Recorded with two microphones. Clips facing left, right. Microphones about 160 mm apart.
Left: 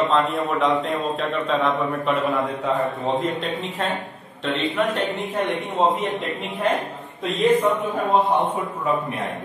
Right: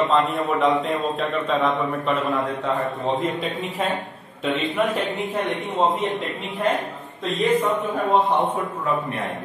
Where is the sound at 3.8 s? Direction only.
Centre (ahead or behind).